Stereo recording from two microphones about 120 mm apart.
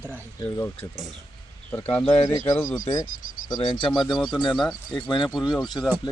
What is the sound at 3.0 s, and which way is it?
Cricket, 90° left.